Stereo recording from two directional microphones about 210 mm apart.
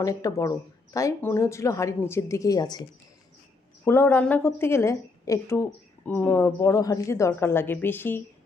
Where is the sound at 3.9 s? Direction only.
10° left (ahead or behind).